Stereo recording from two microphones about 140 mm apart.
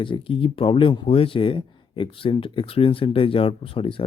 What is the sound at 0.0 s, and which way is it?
Speech, 40° left (ahead or behind).